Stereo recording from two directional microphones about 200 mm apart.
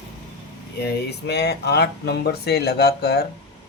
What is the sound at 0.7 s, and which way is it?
Speech, 55° left (ahead or behind).